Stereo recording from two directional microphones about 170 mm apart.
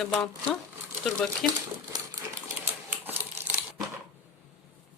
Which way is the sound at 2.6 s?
10° right (ahead or behind).